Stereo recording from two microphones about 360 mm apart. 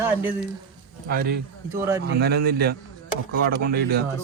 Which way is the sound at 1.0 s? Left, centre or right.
Right.